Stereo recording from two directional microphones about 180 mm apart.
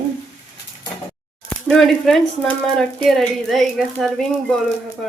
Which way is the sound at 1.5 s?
Centre (ahead or behind).